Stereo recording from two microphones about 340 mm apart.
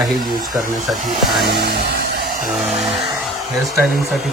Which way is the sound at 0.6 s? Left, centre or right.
Right.